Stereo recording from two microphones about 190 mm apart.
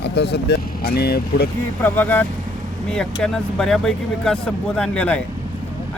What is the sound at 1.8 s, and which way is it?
Speech, 10° left (ahead or behind).